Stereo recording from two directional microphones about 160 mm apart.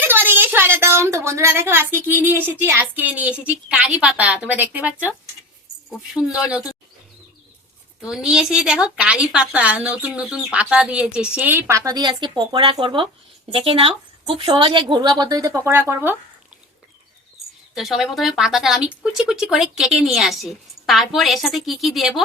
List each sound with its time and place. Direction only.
0.0 s a woman's voice: 15° right (ahead or behind)
6.1 s speech: 5° right (ahead or behind)
8.0 s a woman's voice: 5° right (ahead or behind)
17.7 s speech: centre (ahead or behind)